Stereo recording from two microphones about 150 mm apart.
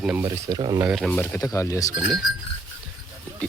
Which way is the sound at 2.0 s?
Centre (ahead or behind).